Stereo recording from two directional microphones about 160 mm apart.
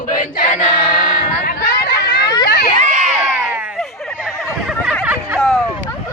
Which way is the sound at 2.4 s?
75° left (ahead or behind).